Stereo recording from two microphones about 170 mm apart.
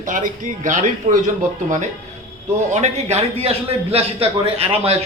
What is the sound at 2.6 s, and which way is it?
A man's voice, 40° right (ahead or behind).